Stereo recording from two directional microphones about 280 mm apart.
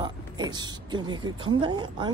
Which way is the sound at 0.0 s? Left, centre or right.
Centre.